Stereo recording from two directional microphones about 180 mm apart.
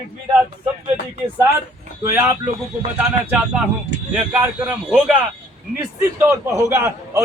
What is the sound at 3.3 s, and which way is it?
A man's voice, 5° right (ahead or behind).